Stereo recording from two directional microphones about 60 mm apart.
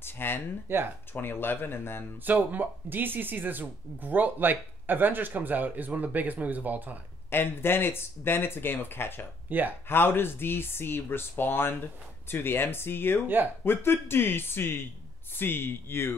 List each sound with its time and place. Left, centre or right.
0.0 s a sound: left
0.7 s speech: right
1.1 s speech: left
2.2 s speech: right
7.2 s speech: left
9.5 s speech: right
9.8 s speech: left